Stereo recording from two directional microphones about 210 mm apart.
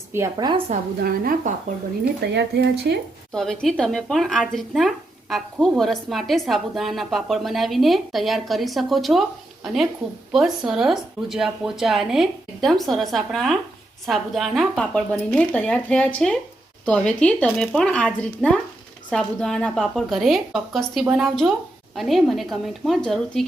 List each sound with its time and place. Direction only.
0.1 s a woman's voice: 15° right (ahead or behind)
0.7 s a woman's voice: 45° right (ahead or behind)
2.2 s speech: 55° right (ahead or behind)
3.3 s speech: centre (ahead or behind)